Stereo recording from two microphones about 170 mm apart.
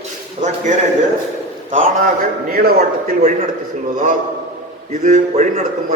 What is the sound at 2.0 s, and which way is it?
A man's voice, 60° right (ahead or behind).